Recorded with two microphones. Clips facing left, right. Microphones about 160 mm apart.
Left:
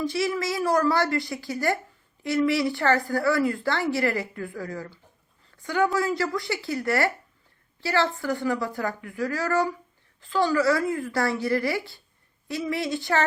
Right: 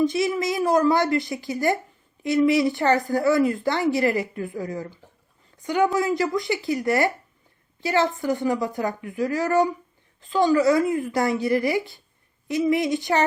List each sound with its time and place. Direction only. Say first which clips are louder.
0.0 s a woman's voice: right 4 dB; 20° right (ahead or behind)